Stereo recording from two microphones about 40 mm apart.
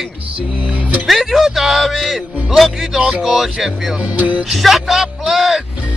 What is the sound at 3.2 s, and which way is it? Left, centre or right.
Speech, centre.